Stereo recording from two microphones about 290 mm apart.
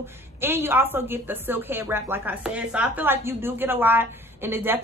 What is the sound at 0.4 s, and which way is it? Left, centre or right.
A woman's voice, centre.